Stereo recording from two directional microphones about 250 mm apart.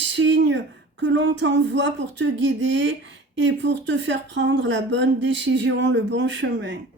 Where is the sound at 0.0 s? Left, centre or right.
Right.